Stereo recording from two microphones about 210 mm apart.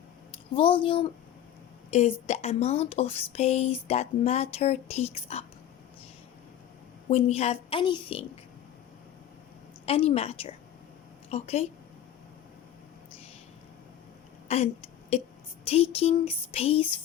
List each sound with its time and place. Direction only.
0.5 s a woman's voice: 25° left (ahead or behind)
7.1 s a woman's voice: 30° left (ahead or behind)
9.8 s a woman's voice: 25° left (ahead or behind)
14.4 s a sound: 30° left (ahead or behind)
15.1 s a woman's voice: 30° left (ahead or behind)